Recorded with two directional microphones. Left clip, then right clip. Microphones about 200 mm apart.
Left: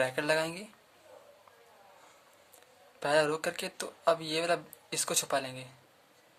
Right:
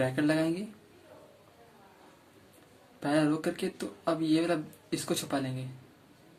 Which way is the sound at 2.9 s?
45° left (ahead or behind).